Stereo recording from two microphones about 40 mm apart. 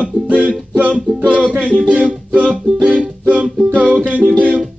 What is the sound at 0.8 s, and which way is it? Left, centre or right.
Music, right.